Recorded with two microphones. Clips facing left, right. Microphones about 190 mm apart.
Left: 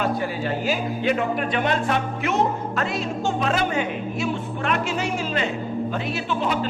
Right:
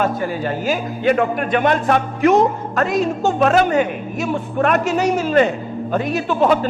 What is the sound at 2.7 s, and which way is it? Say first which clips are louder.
A man's voice: right 7 dB; 45° right (ahead or behind).